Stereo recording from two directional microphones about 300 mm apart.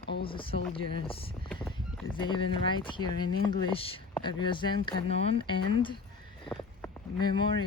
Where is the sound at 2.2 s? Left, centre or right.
Centre.